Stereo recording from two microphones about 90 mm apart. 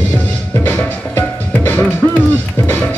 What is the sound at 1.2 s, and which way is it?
Music, 20° left (ahead or behind).